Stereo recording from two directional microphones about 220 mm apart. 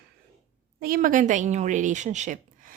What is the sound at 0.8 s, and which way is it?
A woman's voice, 40° right (ahead or behind).